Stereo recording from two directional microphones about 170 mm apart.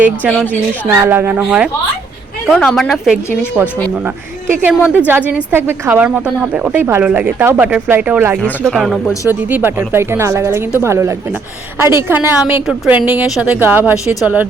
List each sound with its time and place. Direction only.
0.0 s a woman's voice: 10° right (ahead or behind)
4.6 s a woman's voice: 10° right (ahead or behind)
8.4 s a woman's voice: 5° left (ahead or behind); by 12.6 s 15° right (ahead or behind)
12.6 s a woman's voice: 5° right (ahead or behind)